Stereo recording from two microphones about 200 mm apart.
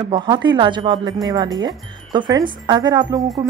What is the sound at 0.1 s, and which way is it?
A woman's voice, 20° right (ahead or behind).